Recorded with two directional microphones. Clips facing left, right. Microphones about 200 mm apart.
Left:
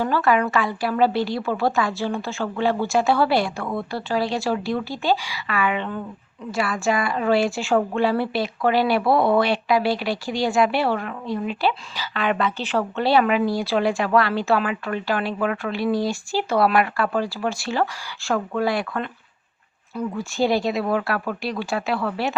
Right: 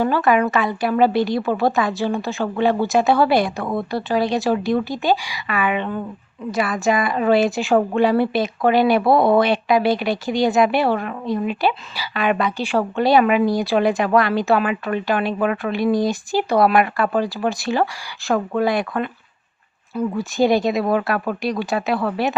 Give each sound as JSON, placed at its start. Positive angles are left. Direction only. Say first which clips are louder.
{"t": 0.0, "sound": "a woman's voice", "louder": "right 3 dB", "side_deg": -15}
{"t": 19.9, "sound": "speech", "louder": "right 4 dB", "side_deg": -5}
{"t": 20.3, "sound": "speech", "louder": "right 4 dB", "side_deg": -15}